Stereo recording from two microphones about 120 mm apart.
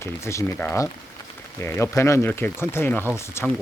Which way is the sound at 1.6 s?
20° left (ahead or behind).